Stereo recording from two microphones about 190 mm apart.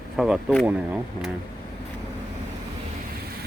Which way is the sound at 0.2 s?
Centre (ahead or behind).